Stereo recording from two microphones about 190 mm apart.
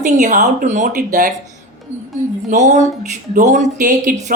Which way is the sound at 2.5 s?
40° right (ahead or behind).